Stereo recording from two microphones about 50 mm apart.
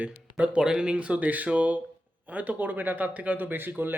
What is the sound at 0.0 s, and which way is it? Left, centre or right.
Speech, right.